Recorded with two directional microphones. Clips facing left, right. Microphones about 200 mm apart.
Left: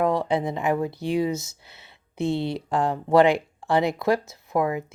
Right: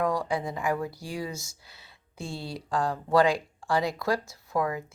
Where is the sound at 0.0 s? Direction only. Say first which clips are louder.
Left 5 dB; 25° left (ahead or behind).